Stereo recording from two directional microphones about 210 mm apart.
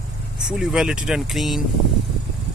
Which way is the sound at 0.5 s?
5° right (ahead or behind).